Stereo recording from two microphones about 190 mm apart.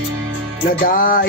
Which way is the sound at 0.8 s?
45° left (ahead or behind).